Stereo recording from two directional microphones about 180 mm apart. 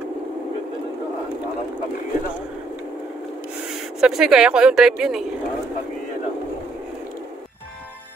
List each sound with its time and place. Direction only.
4.0 s a woman's voice: 5° right (ahead or behind)